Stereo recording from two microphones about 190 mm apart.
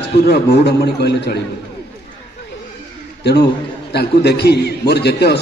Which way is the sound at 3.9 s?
60° left (ahead or behind).